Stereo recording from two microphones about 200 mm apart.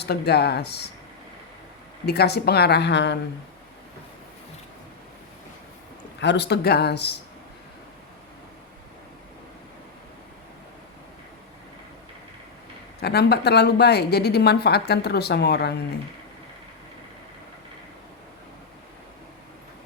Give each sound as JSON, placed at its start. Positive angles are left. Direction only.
{"t": 0.0, "sound": "a woman's voice", "side_deg": 55}
{"t": 2.0, "sound": "a woman's voice", "side_deg": 55}
{"t": 6.1, "sound": "a woman's voice", "side_deg": 60}
{"t": 13.0, "sound": "a woman's voice", "side_deg": 55}